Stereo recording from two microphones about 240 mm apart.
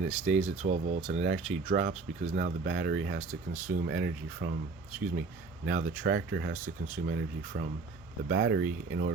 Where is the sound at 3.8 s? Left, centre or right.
Right.